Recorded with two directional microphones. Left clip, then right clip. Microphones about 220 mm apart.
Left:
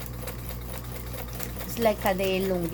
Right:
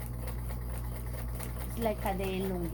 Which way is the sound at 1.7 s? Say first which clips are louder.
Left 9 dB; 50° left (ahead or behind).